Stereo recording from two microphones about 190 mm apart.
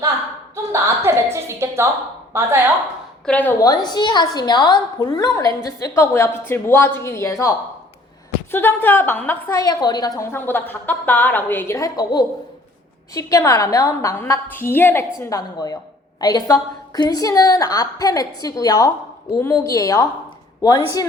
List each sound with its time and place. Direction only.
0.5 s a woman's voice: 15° right (ahead or behind)
3.2 s a woman's voice: 10° left (ahead or behind)
3.6 s a woman's voice: 20° left (ahead or behind)